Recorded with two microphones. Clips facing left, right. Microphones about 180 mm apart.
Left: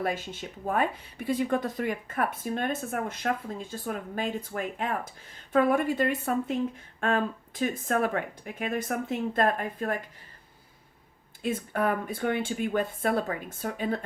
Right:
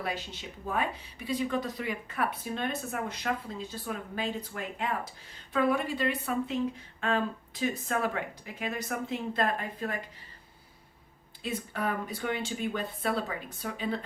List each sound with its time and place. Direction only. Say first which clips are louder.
0.0 s speech: left 5 dB; 50° left (ahead or behind)
11.4 s speech: left 5 dB; 50° left (ahead or behind)